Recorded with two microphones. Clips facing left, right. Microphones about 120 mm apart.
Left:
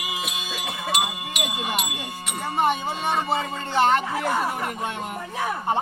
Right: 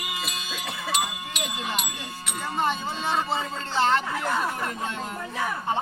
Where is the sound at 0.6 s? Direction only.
10° left (ahead or behind).